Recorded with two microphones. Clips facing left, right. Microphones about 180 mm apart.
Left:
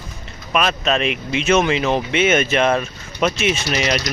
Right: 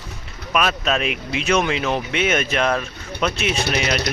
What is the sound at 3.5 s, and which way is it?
Speech, 60° right (ahead or behind).